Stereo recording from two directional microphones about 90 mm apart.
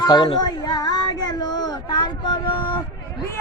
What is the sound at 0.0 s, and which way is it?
Speech, 55° left (ahead or behind).